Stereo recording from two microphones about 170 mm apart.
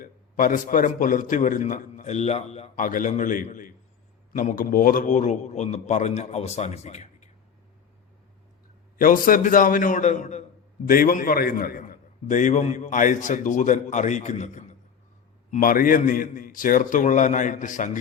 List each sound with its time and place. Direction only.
0.0 s a man's voice: 55° left (ahead or behind)
9.0 s a man's voice: 55° left (ahead or behind)